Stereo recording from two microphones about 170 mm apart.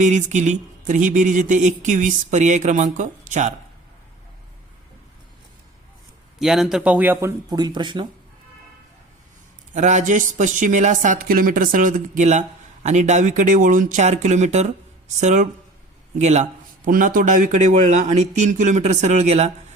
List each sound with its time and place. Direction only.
0.0 s speech: 45° right (ahead or behind)
6.4 s speech: 5° right (ahead or behind); by 8.0 s 25° right (ahead or behind)
9.7 s speech: 45° right (ahead or behind)